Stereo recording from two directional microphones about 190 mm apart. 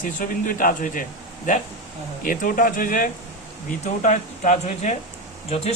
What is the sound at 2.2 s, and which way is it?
A man's voice, 45° left (ahead or behind).